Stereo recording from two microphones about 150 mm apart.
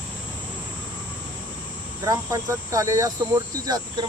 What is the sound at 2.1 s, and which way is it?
Speech, 20° right (ahead or behind).